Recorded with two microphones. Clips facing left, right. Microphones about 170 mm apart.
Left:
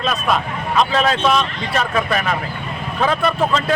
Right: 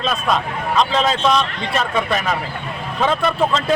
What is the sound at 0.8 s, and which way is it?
Speech, 5° left (ahead or behind).